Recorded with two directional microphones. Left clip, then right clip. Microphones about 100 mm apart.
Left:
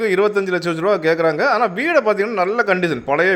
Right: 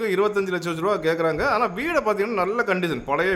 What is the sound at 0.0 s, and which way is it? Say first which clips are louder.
A man's voice: left 5 dB; 25° left (ahead or behind).